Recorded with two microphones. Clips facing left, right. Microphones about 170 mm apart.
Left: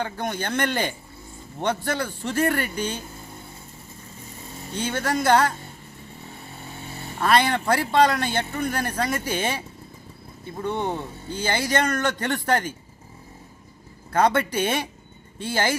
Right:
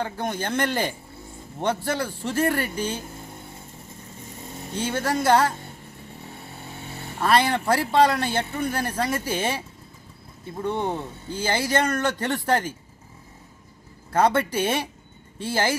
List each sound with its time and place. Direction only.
0.0 s speech: 5° right (ahead or behind)
4.7 s speech: 5° right (ahead or behind)
7.2 s speech: 5° right (ahead or behind)
14.1 s speech: 5° right (ahead or behind)